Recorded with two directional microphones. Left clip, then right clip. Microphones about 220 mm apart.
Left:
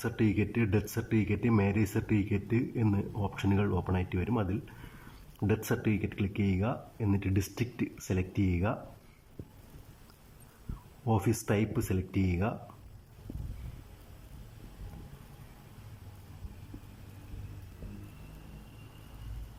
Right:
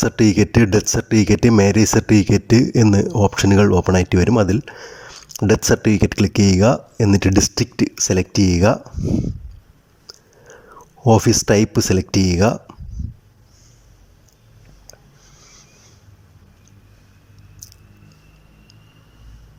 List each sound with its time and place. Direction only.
0.0 s speech: 45° right (ahead or behind)
11.0 s speech: 45° right (ahead or behind)